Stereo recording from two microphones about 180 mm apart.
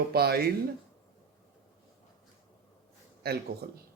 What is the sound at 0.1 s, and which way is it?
Speech, 60° right (ahead or behind).